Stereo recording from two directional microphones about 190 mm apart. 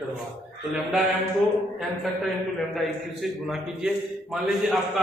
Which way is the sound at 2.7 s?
Centre (ahead or behind).